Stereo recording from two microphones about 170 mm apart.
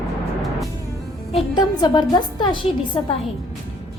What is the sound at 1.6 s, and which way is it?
A woman's voice, 25° left (ahead or behind).